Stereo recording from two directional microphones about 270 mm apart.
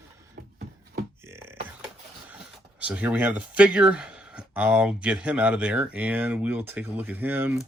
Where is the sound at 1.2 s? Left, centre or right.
Centre.